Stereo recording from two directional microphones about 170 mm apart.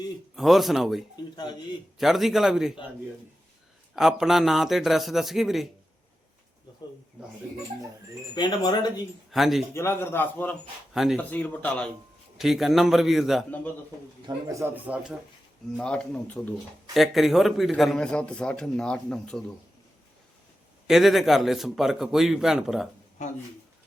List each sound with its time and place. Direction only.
0.3 s a man's voice: centre (ahead or behind)
3.9 s a man's voice: centre (ahead or behind)
8.4 s speech: 25° left (ahead or behind)
9.3 s a man's voice: centre (ahead or behind)
9.7 s a man's voice: 15° left (ahead or behind)
10.9 s a man's voice: centre (ahead or behind)
11.2 s a man's voice: 10° left (ahead or behind)
14.3 s speech: 20° right (ahead or behind)
15.8 s a man's voice: 5° left (ahead or behind)
20.8 s a man's voice: centre (ahead or behind)